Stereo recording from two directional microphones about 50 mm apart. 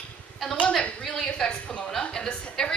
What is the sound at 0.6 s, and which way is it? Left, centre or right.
Speech, left.